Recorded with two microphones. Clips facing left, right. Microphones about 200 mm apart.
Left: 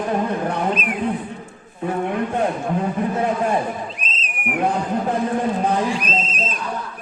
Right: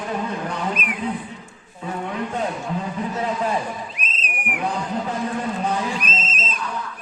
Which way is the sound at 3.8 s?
30° left (ahead or behind).